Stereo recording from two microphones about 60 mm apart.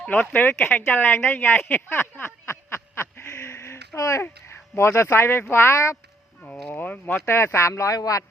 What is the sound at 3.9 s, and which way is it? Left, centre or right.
Speech, left.